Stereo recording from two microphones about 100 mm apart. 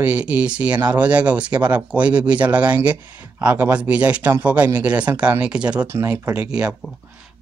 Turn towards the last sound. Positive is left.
turn(degrees=-10)  # may be behind; listen again after turning